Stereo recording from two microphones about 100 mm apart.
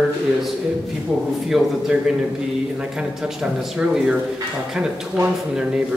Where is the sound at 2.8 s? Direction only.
5° right (ahead or behind).